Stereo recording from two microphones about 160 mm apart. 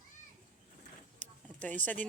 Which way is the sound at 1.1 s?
10° left (ahead or behind).